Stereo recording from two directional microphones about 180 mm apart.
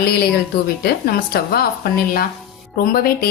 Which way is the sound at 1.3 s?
60° left (ahead or behind).